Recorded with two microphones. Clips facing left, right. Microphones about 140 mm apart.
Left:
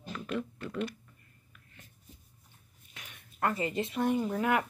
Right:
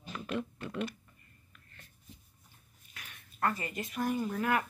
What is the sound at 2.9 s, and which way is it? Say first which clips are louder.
Speech: left 1 dB; 15° left (ahead or behind).